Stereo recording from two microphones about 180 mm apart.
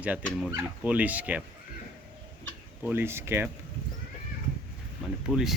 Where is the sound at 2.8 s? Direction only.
10° right (ahead or behind).